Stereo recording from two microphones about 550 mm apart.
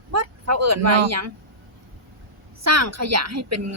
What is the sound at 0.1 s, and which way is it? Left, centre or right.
Speech, right.